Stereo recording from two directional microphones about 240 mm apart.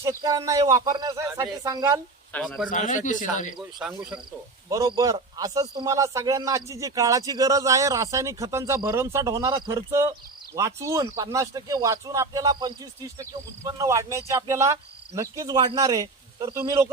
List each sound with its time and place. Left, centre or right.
0.0 s a man's voice: centre
2.3 s speech: centre
2.6 s speech: left
3.8 s speech: centre
4.7 s a man's voice: centre